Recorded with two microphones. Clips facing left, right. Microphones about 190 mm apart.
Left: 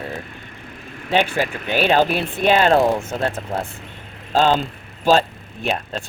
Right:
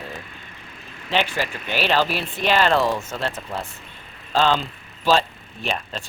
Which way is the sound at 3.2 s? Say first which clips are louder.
Left 5 dB; 50° left (ahead or behind).